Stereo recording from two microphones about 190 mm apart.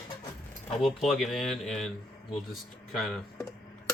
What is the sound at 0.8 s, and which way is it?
Speech, centre (ahead or behind).